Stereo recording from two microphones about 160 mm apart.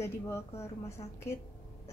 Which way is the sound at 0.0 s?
15° left (ahead or behind).